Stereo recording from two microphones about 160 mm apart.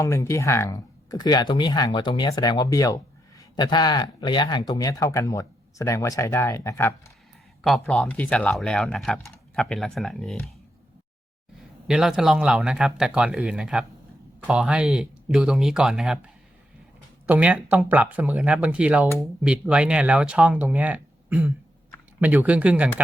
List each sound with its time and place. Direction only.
0.0 s speech: 20° left (ahead or behind)
7.6 s speech: centre (ahead or behind)
11.9 s speech: 5° right (ahead or behind)